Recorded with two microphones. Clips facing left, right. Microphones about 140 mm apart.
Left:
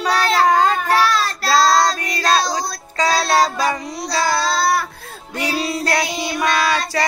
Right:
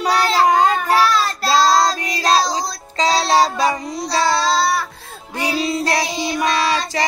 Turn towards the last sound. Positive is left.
turn(degrees=-25)  # may be behind; listen again after turning